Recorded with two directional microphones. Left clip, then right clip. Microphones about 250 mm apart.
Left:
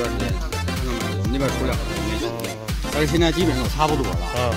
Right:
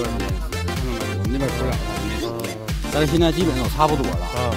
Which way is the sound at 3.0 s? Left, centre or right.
Right.